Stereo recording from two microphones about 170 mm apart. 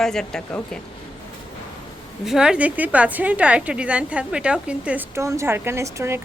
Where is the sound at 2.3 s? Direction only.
5° right (ahead or behind).